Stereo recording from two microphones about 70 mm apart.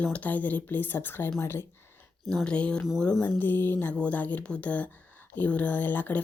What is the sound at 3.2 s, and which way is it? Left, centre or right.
Speech, left.